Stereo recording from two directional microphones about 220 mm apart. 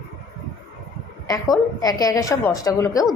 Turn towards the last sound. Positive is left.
turn(degrees=15)  # may be behind; listen again after turning